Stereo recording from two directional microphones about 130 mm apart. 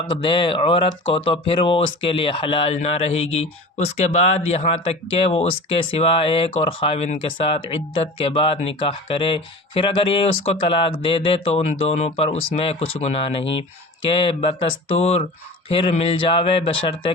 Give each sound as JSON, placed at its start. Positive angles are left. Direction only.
{"t": 0.2, "sound": "speech", "side_deg": 40}